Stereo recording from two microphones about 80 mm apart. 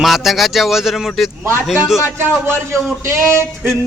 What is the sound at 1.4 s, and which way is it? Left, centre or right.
Speech, right.